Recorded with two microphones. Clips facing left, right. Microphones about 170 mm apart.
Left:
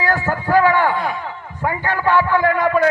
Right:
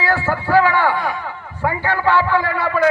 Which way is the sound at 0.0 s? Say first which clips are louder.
Even; 20° left (ahead or behind).